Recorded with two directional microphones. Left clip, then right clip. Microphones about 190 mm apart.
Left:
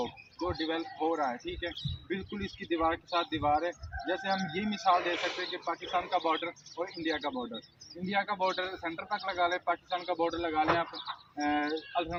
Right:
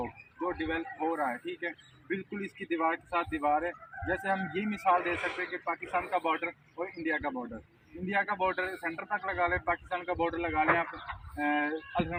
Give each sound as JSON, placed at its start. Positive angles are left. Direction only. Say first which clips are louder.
{"t": 0.0, "sound": "speech", "louder": "even", "side_deg": 5}